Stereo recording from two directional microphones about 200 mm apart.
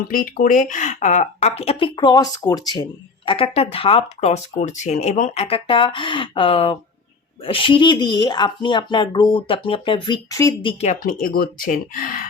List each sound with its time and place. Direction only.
0.1 s speech: 45° left (ahead or behind)
11.0 s speech: 45° left (ahead or behind)